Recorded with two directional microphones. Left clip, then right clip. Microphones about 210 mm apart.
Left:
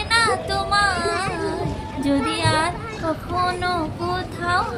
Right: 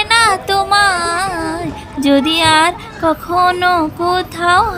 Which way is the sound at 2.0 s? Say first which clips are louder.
Right 10 dB; 50° right (ahead or behind).